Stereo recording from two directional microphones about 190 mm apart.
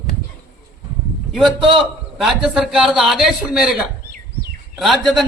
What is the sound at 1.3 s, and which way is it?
A man's voice, centre (ahead or behind).